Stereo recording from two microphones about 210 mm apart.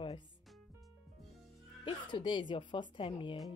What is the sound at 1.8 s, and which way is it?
A woman's voice, 20° left (ahead or behind).